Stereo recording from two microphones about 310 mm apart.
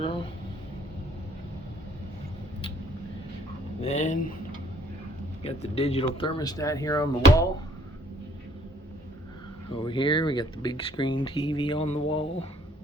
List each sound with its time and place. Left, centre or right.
3.8 s speech: left
5.4 s speech: centre
9.8 s speech: centre